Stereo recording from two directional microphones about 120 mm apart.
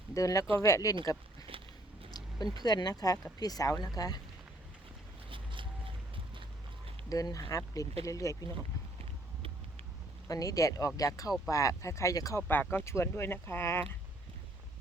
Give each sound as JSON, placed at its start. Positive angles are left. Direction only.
{"t": 0.1, "sound": "speech", "side_deg": 25}
{"t": 1.5, "sound": "biting", "side_deg": -50}
{"t": 2.0, "sound": "a sound", "side_deg": 35}
{"t": 2.6, "sound": "speech", "side_deg": 35}
{"t": 5.3, "sound": "vehicle", "side_deg": -45}
{"t": 7.1, "sound": "speech", "side_deg": 30}
{"t": 10.2, "sound": "speech", "side_deg": 30}
{"t": 12.4, "sound": "speech", "side_deg": 15}